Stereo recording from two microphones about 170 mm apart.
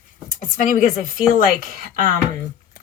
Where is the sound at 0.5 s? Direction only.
50° left (ahead or behind).